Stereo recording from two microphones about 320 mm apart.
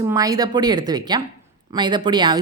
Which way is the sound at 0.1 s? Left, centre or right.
Centre.